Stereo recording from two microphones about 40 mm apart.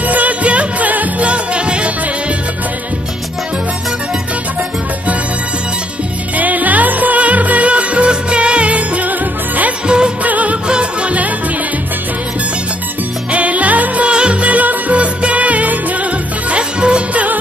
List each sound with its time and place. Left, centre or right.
0.0 s music: right
1.3 s music: right
6.3 s music: right
9.8 s music of bollywood: right
10.2 s music: right
10.7 s music: right
13.3 s music: right
14.1 s music: right